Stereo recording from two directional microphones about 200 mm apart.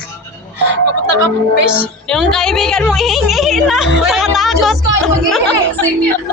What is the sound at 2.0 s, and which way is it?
A woman's voice, centre (ahead or behind).